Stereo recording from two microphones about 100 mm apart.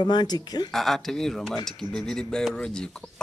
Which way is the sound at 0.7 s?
5° left (ahead or behind).